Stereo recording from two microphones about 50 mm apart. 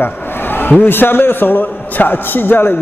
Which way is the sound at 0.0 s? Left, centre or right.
Left.